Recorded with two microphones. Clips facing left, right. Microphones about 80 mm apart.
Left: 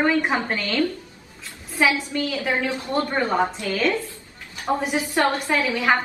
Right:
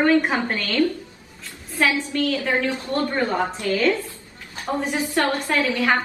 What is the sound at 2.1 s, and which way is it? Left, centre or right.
A woman's voice, centre.